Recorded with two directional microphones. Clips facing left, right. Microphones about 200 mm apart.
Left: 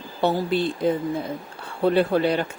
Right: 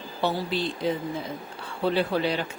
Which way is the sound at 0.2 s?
55° left (ahead or behind).